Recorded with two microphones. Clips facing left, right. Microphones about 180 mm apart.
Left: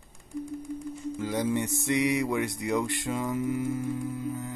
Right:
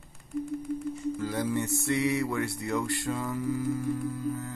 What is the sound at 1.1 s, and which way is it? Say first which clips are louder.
Mantra: left 4 dB; 20° left (ahead or behind).